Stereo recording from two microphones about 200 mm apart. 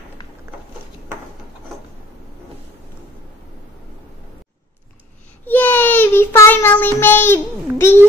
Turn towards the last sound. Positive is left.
turn(degrees=10)  # may be behind; listen again after turning